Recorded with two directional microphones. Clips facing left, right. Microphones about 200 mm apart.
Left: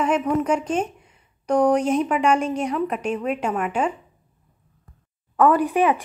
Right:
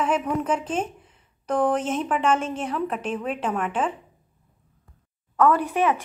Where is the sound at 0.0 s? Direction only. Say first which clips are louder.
Left 3 dB; 5° right (ahead or behind).